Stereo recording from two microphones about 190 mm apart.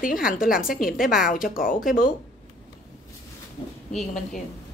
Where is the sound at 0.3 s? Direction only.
50° left (ahead or behind).